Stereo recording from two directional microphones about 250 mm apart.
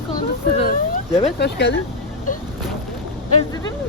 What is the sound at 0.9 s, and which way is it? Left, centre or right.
Speech, left.